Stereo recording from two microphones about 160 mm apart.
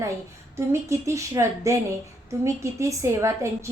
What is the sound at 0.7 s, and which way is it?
A woman's voice, 15° right (ahead or behind).